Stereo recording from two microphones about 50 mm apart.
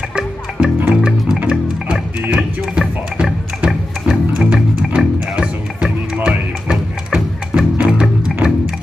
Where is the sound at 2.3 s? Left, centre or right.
Centre.